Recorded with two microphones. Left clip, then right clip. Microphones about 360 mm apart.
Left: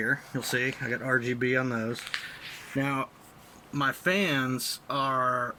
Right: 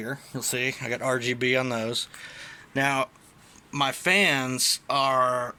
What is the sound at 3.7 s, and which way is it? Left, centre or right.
Speech, right.